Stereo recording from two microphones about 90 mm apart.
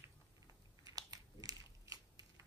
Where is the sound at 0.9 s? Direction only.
45° right (ahead or behind).